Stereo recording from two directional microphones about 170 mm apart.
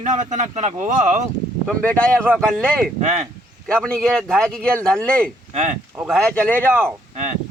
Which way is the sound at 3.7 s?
5° left (ahead or behind).